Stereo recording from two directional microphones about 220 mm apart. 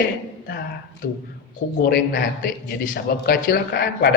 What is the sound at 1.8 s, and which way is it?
A man's voice, 40° left (ahead or behind).